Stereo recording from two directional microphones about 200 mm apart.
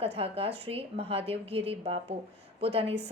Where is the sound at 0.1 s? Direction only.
30° right (ahead or behind).